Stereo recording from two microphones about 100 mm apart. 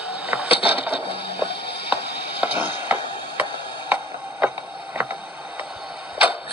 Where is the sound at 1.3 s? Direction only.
60° left (ahead or behind).